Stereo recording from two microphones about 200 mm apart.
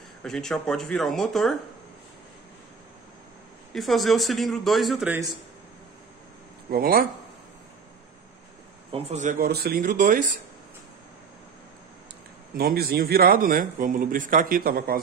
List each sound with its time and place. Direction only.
0.2 s a man's voice: 5° left (ahead or behind)
3.7 s a man's voice: centre (ahead or behind)
6.7 s a man's voice: 45° right (ahead or behind)
8.9 s a man's voice: 35° right (ahead or behind)
12.5 s a man's voice: 50° right (ahead or behind)